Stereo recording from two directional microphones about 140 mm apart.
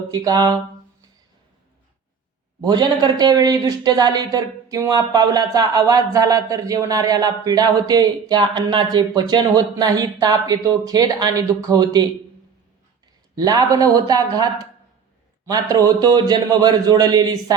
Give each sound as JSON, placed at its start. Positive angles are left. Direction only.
{"t": 0.1, "sound": "speech", "side_deg": -25}
{"t": 2.6, "sound": "speech", "side_deg": -30}
{"t": 13.3, "sound": "speech", "side_deg": -30}